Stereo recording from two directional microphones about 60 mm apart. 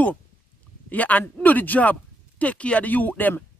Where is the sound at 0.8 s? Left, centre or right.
Left.